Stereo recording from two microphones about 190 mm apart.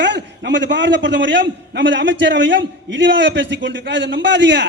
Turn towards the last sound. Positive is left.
turn(degrees=-70)  # may be behind; listen again after turning